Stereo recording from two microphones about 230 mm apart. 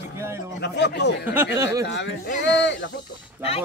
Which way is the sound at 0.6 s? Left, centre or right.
Left.